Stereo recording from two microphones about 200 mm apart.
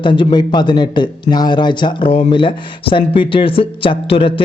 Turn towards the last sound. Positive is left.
turn(degrees=25)  # may be behind; listen again after turning